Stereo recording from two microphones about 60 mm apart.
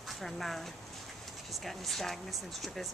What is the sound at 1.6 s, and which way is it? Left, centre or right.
Speech, centre.